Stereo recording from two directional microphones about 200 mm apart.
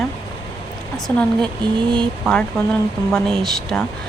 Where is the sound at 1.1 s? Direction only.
10° left (ahead or behind).